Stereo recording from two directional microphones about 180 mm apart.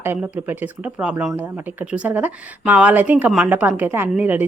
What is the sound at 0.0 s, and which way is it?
A woman's voice, 10° right (ahead or behind).